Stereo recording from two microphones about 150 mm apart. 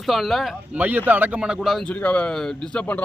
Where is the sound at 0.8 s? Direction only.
10° right (ahead or behind).